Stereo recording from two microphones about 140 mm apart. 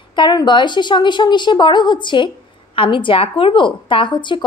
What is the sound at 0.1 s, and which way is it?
A woman's voice, 30° left (ahead or behind).